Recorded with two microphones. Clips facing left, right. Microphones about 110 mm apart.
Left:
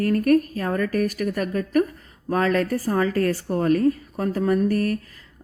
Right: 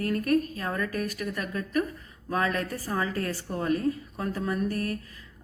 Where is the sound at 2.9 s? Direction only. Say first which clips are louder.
Left 7 dB; 60° left (ahead or behind).